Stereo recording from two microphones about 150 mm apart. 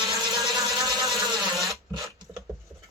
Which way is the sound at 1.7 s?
20° right (ahead or behind).